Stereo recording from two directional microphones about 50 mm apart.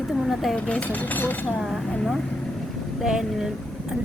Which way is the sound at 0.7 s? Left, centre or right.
Left.